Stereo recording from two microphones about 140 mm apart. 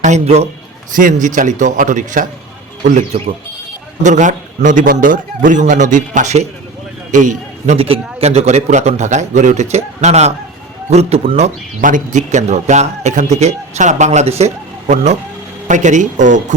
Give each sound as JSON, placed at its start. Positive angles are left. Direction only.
{"t": 0.0, "sound": "a man's voice", "side_deg": -55}
{"t": 0.9, "sound": "a man's voice", "side_deg": -65}
{"t": 3.1, "sound": "a man's voice", "side_deg": -45}
{"t": 4.0, "sound": "a man's voice", "side_deg": -60}
{"t": 7.8, "sound": "a man's voice", "side_deg": -45}
{"t": 11.9, "sound": "a man's voice", "side_deg": -65}